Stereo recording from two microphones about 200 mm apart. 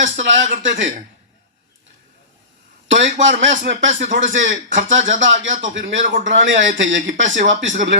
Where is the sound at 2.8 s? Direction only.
70° right (ahead or behind).